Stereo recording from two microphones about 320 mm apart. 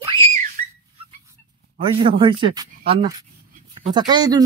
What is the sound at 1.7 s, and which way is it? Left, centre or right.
Speech, centre.